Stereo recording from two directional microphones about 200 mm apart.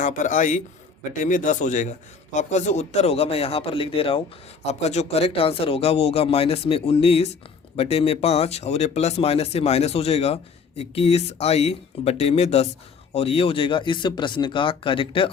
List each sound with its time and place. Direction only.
0.0 s a man's voice: 40° left (ahead or behind)